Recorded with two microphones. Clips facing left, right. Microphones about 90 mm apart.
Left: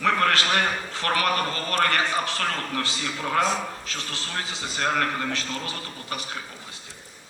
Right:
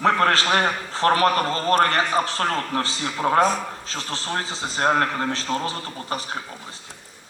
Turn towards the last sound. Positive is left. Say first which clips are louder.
# right 5 dB
turn(degrees=-35)  # may be behind; listen again after turning